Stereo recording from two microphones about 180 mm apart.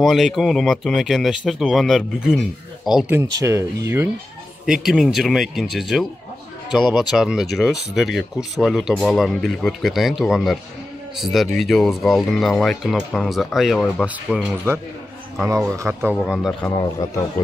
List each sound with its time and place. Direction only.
0.0 s speech: centre (ahead or behind)
3.3 s speech: 15° right (ahead or behind)
4.6 s speech: centre (ahead or behind)
16.6 s a man's voice: 15° left (ahead or behind)